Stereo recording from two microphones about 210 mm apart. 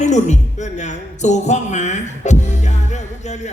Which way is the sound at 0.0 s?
35° left (ahead or behind).